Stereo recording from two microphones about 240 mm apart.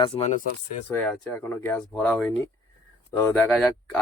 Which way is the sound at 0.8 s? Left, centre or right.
Centre.